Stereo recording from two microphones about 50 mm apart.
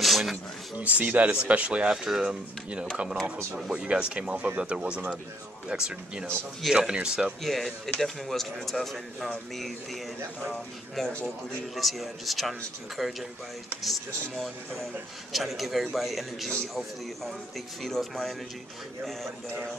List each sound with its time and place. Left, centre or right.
0.0 s a sound: centre
0.7 s speech: right
2.0 s speech: centre
3.5 s speech: centre
7.4 s speech: centre
10.5 s speech: centre
17.8 s speech: centre